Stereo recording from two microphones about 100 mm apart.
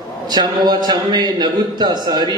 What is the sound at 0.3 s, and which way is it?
A man's voice, 45° right (ahead or behind).